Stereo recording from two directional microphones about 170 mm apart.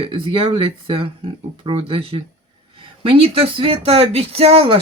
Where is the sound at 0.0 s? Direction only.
30° right (ahead or behind).